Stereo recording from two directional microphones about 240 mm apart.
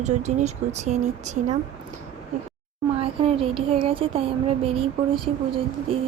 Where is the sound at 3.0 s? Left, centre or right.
Right.